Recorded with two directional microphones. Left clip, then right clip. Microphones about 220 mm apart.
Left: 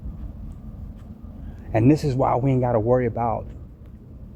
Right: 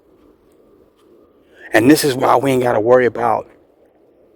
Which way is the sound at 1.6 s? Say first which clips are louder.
Right 9 dB; 50° right (ahead or behind).